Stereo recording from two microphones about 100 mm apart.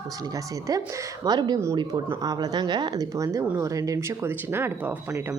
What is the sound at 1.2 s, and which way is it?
A woman's voice, 40° right (ahead or behind).